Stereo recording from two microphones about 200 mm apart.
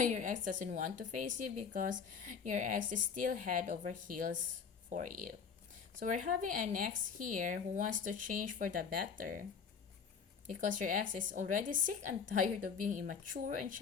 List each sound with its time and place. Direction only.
0.0 s a woman's voice: 40° right (ahead or behind)